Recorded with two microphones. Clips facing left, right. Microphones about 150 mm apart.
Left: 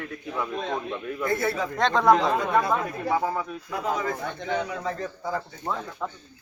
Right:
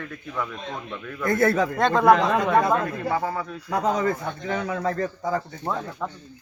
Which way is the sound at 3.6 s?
90° right.